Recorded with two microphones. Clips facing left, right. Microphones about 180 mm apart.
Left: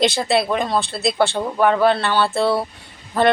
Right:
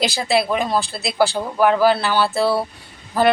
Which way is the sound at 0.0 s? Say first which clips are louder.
Left 1 dB; centre (ahead or behind).